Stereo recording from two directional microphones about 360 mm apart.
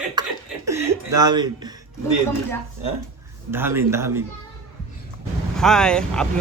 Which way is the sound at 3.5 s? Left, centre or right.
Centre.